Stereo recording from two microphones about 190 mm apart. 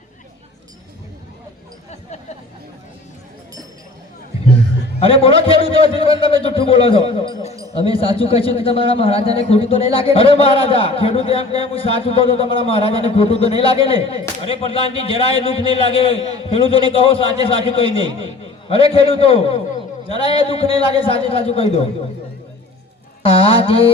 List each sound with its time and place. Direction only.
4.9 s a man's voice: 30° left (ahead or behind)
23.2 s a man's voice: 30° left (ahead or behind)